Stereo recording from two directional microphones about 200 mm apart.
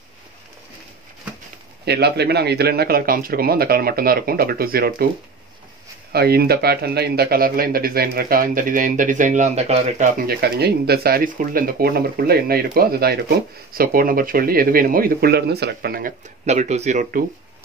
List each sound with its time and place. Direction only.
1.9 s speech: 55° right (ahead or behind)
6.1 s speech: 50° right (ahead or behind); by 10.0 s 30° right (ahead or behind)
10.1 s speech: 50° right (ahead or behind)
16.4 s speech: 35° right (ahead or behind)